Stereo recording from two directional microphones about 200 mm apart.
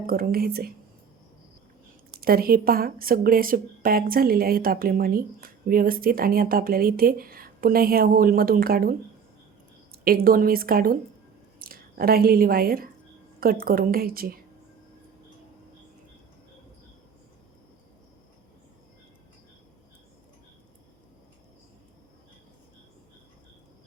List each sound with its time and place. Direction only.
0.1 s a woman's voice: 50° right (ahead or behind)
2.2 s a woman's voice: 50° right (ahead or behind)